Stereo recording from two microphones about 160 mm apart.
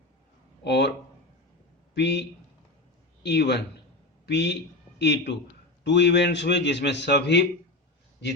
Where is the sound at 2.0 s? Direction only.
90° left.